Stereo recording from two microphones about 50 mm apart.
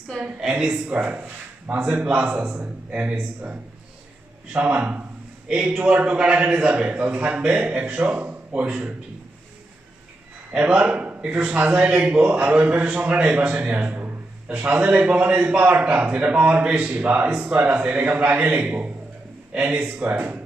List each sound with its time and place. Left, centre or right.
0.3 s a woman's voice: centre
0.7 s a man's voice: right
10.5 s a man's voice: right